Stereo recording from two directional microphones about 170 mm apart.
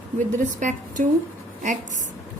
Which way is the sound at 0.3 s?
45° right (ahead or behind).